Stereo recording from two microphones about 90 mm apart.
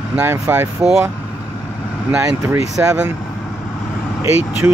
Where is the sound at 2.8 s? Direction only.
20° right (ahead or behind).